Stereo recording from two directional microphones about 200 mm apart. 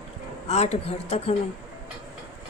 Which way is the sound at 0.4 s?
35° left (ahead or behind).